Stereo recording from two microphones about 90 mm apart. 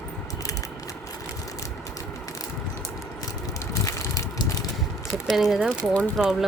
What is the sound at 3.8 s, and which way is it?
Crushing, 40° left (ahead or behind).